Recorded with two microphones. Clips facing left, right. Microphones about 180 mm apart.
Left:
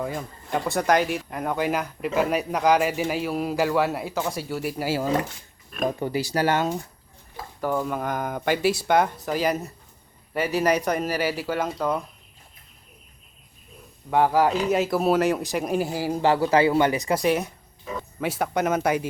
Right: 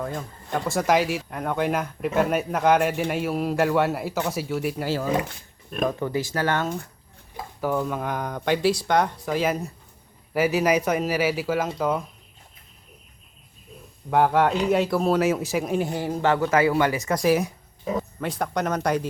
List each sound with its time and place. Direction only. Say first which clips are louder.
0.0 s speech: left 1 dB; 5° left (ahead or behind)
6.3 s speech: left 5 dB; 15° left (ahead or behind)
7.6 s speech: even; centre (ahead or behind)
14.1 s speech: even; centre (ahead or behind)
16.2 s speech: left 1 dB; 35° left (ahead or behind)
17.2 s speech: right 2 dB; centre (ahead or behind)